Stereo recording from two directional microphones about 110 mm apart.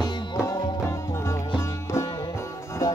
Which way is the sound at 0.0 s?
45° left (ahead or behind).